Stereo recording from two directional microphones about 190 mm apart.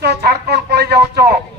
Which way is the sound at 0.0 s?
60° right (ahead or behind).